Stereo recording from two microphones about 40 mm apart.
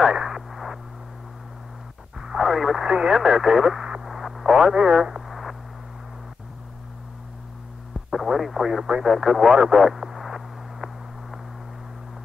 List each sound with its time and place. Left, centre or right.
0.1 s radio: centre
0.5 s a sound: centre
2.1 s radio: centre
2.8 s speech: centre
4.0 s radio: centre
5.2 s a sound: centre
8.1 s speech: centre
9.7 s radio: centre